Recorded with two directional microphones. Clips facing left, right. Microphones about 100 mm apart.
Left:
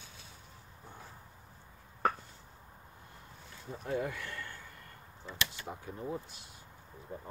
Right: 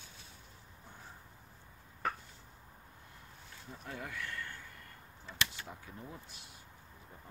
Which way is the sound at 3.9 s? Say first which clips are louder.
Left 7 dB; 35° left (ahead or behind).